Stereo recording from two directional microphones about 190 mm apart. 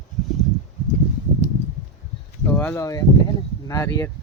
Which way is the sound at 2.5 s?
10° left (ahead or behind).